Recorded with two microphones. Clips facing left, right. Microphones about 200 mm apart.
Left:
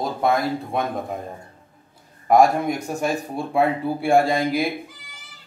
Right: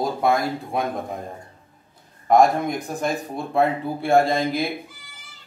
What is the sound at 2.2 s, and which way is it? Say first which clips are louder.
Speech: left 1 dB; 10° left (ahead or behind).